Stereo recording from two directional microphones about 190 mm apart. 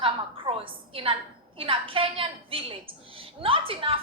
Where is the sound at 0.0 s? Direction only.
30° right (ahead or behind).